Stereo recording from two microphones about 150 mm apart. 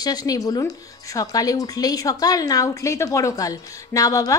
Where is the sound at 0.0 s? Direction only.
25° left (ahead or behind).